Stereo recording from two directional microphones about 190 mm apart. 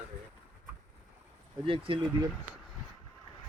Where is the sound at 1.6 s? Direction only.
25° right (ahead or behind).